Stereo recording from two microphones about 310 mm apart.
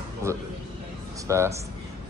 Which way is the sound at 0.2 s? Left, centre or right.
Centre.